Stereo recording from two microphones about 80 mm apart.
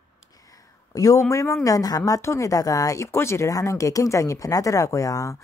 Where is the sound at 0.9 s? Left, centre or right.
Left.